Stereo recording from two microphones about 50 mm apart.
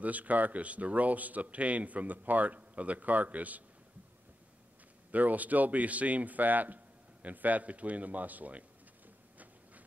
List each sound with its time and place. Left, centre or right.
0.0 s speech: right
5.1 s speech: right